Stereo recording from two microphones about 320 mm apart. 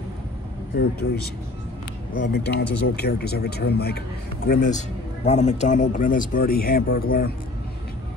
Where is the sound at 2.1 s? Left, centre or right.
Left.